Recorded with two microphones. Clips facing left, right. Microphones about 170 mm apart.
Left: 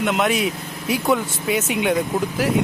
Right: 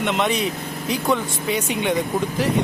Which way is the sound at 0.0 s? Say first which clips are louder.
Left 1 dB; centre (ahead or behind).